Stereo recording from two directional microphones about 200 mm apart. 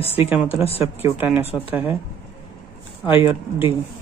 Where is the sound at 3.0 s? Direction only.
25° left (ahead or behind).